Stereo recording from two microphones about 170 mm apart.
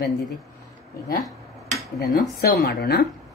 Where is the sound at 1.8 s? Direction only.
60° left (ahead or behind).